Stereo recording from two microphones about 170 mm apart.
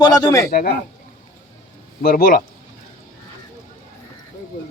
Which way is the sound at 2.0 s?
60° left (ahead or behind).